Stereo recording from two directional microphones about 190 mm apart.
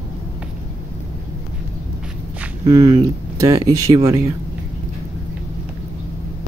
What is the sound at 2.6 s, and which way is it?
Speech, 20° right (ahead or behind).